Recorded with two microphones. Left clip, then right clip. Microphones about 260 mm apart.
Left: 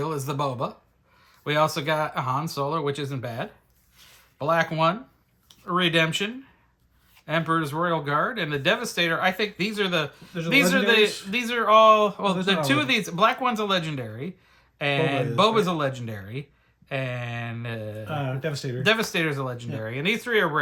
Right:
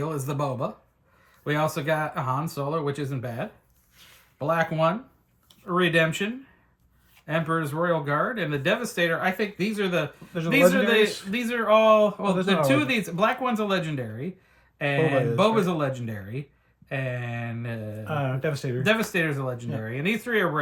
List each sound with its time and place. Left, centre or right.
0.0 s speech: centre
18.0 s speech: centre
18.9 s speech: centre